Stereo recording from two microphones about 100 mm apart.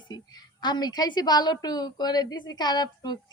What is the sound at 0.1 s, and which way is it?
A woman's voice, 45° left (ahead or behind).